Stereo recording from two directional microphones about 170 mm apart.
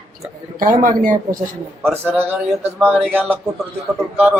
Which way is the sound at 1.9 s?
10° right (ahead or behind).